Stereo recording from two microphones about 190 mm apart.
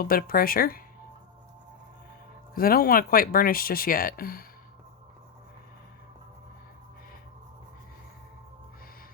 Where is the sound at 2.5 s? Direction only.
50° left (ahead or behind).